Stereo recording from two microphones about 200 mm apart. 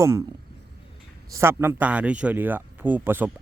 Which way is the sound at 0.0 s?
15° right (ahead or behind).